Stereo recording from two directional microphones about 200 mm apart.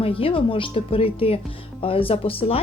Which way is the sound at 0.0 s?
30° left (ahead or behind).